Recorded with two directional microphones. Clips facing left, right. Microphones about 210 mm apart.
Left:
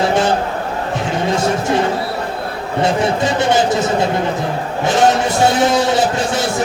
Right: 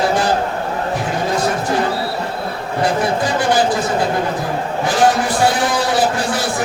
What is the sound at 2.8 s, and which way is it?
Speech, 25° left (ahead or behind).